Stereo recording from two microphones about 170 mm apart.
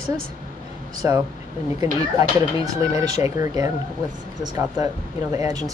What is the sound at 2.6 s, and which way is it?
Speech, 20° right (ahead or behind).